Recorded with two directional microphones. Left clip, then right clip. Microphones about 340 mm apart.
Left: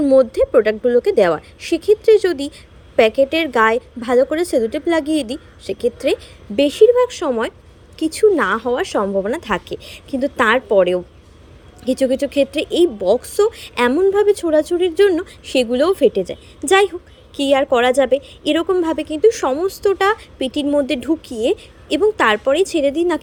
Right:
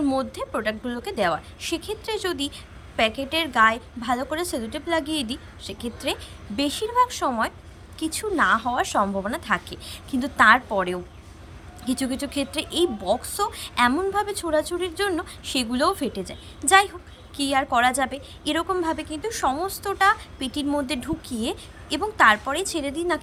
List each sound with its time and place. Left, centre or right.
0.0 s speech: centre